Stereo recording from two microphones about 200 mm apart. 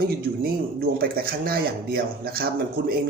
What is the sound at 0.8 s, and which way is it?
Speech, 50° right (ahead or behind).